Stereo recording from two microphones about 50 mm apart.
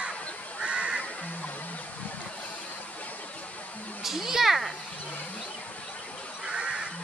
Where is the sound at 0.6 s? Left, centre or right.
Centre.